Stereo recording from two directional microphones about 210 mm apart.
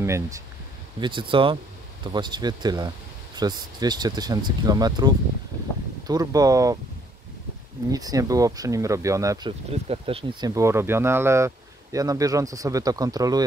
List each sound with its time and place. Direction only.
0.0 s speech: 15° right (ahead or behind)
1.0 s speech: 25° right (ahead or behind)
7.9 s speech: 15° right (ahead or behind)
10.5 s speech: 15° right (ahead or behind)